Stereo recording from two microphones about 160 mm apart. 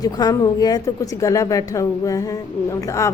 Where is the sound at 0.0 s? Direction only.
25° left (ahead or behind).